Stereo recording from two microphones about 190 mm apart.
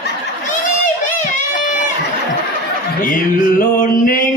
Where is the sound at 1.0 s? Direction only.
40° left (ahead or behind).